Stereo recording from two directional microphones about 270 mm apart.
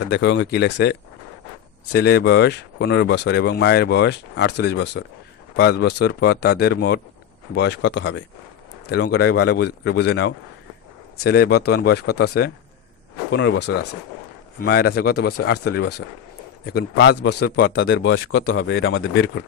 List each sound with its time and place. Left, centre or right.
0.0 s speech: left